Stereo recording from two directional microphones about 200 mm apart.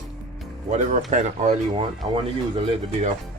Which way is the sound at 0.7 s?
40° right (ahead or behind).